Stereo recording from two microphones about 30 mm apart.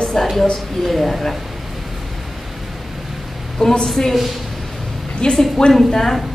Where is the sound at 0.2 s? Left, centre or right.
Centre.